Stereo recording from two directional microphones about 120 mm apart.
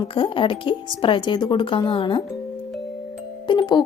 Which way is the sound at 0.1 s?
45° left (ahead or behind).